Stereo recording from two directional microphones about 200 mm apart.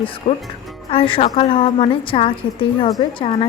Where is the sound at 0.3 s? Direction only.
30° left (ahead or behind).